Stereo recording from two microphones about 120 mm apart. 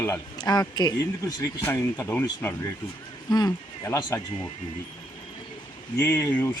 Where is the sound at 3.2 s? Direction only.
35° left (ahead or behind).